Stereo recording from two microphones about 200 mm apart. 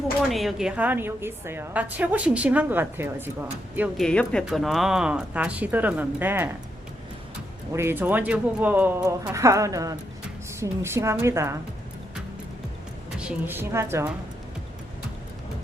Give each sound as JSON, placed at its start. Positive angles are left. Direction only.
{"t": 0.3, "sound": "a woman's voice", "side_deg": 0}
{"t": 3.8, "sound": "speech", "side_deg": 0}
{"t": 7.7, "sound": "a woman's voice", "side_deg": -10}
{"t": 13.1, "sound": "a woman's voice", "side_deg": -5}